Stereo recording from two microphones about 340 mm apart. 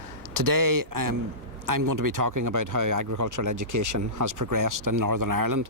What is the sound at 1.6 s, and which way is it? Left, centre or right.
Speech, right.